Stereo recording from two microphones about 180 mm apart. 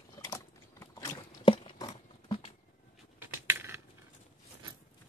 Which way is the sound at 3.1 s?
10° right (ahead or behind).